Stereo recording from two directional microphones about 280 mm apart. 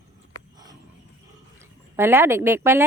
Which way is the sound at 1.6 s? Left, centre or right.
Centre.